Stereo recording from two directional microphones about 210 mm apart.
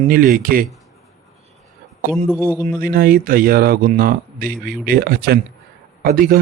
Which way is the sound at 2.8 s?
45° right (ahead or behind).